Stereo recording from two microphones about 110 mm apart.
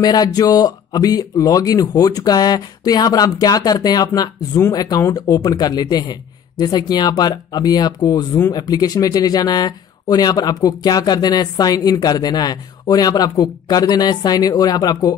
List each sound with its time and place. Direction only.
0.0 s speech: 35° left (ahead or behind)